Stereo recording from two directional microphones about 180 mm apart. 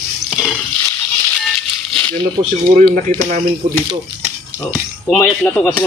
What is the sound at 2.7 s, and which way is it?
Speech, 45° right (ahead or behind).